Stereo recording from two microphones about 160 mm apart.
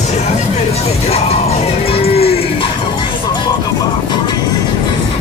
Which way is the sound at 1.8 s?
40° left (ahead or behind).